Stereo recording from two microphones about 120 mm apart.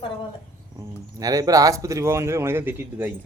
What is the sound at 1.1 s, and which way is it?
A man's voice, 30° right (ahead or behind).